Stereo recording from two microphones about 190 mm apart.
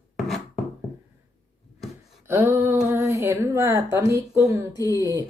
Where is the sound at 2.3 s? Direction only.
10° right (ahead or behind).